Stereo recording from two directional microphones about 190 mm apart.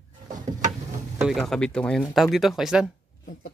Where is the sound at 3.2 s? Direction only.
45° left (ahead or behind).